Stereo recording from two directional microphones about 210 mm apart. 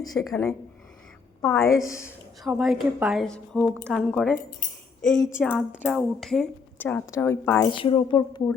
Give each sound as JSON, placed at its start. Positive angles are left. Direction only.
{"t": 0.3, "sound": "a woman's voice", "side_deg": 10}
{"t": 1.8, "sound": "a woman's voice", "side_deg": 15}
{"t": 2.4, "sound": "a woman's voice", "side_deg": 0}
{"t": 5.1, "sound": "a woman's voice", "side_deg": 20}
{"t": 5.4, "sound": "a woman's voice", "side_deg": -5}
{"t": 7.7, "sound": "a woman's voice", "side_deg": 25}